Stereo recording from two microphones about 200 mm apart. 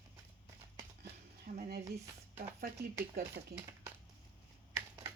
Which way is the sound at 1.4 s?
50° right (ahead or behind).